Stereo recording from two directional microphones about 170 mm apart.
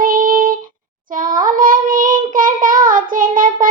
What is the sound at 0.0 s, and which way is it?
Child singing, 55° right (ahead or behind).